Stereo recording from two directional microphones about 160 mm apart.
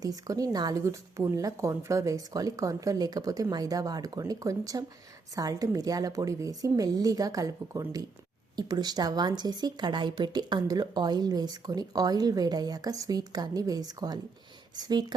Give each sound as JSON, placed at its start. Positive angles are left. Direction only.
{"t": 0.0, "sound": "a woman's voice", "side_deg": -20}